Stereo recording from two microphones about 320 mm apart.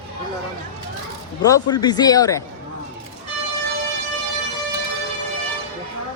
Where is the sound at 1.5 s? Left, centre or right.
Centre.